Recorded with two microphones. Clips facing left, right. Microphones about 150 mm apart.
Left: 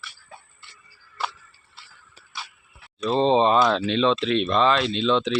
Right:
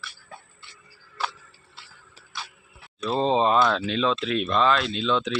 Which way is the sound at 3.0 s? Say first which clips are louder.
Left 3 dB; centre (ahead or behind).